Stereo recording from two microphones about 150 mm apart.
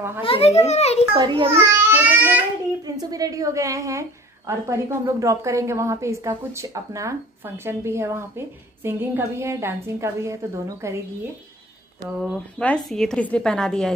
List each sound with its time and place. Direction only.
0.2 s a child's voice: 40° left (ahead or behind)
1.1 s a child's voice: 30° right (ahead or behind)
1.9 s child singing: 10° right (ahead or behind)
2.8 s a woman's voice: 25° right (ahead or behind)
12.2 s a woman's voice: 5° left (ahead or behind)